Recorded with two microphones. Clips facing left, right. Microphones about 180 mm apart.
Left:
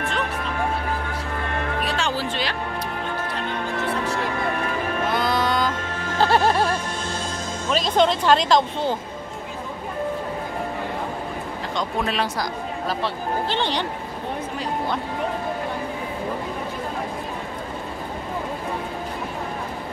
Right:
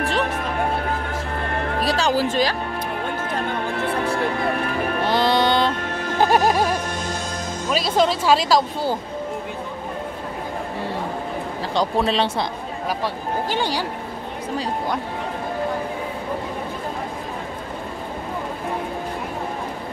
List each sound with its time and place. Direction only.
1.8 s music: 40° right (ahead or behind)
5.0 s music: 30° right (ahead or behind)
6.1 s music: 15° right (ahead or behind)
7.7 s speech: 5° right (ahead or behind)
11.7 s speech: 35° right (ahead or behind)
12.8 s speech: 10° right (ahead or behind)